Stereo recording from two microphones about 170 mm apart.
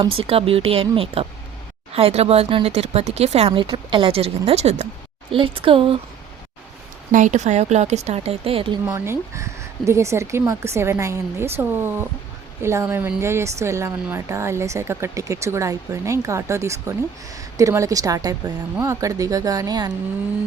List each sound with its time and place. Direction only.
0.0 s speech: 35° right (ahead or behind)
7.1 s speech: 45° right (ahead or behind); by 9.0 s 30° right (ahead or behind)
9.0 s speech: 15° right (ahead or behind)